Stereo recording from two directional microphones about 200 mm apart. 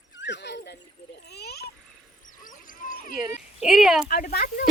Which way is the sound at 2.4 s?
40° left (ahead or behind).